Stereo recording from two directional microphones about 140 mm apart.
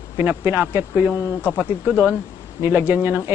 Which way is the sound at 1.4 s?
15° left (ahead or behind).